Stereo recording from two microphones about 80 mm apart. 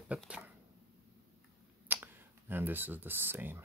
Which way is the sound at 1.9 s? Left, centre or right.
Right.